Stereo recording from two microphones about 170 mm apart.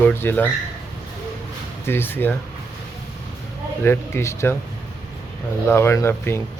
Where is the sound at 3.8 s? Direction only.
15° left (ahead or behind).